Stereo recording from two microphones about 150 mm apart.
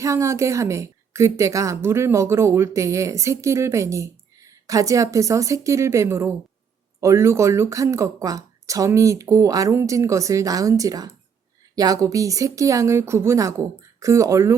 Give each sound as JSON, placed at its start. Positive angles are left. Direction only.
{"t": 0.0, "sound": "speech", "side_deg": -20}